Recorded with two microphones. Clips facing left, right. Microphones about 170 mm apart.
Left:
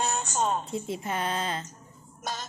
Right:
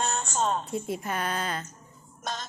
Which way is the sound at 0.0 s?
10° left (ahead or behind).